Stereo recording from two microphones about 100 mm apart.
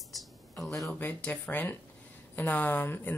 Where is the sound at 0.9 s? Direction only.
20° left (ahead or behind).